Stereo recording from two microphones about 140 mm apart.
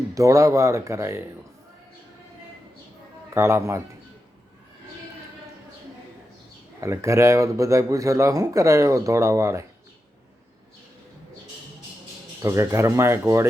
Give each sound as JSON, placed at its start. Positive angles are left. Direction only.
{"t": 0.1, "sound": "speech", "side_deg": -20}
{"t": 3.3, "sound": "speech", "side_deg": -20}
{"t": 6.8, "sound": "speech", "side_deg": -20}
{"t": 12.4, "sound": "speech", "side_deg": -20}